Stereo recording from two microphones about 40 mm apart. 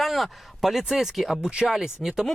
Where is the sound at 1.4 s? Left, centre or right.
Right.